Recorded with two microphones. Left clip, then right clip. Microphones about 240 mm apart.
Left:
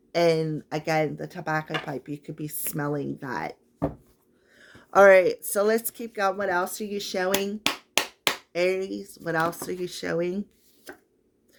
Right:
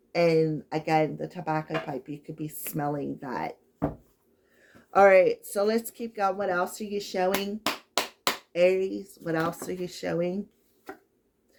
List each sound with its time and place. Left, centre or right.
0.1 s speech: left
4.9 s speech: left
7.3 s clapping: left
8.5 s speech: left